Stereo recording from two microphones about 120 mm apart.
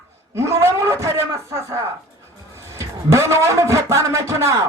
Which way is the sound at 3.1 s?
25° right (ahead or behind).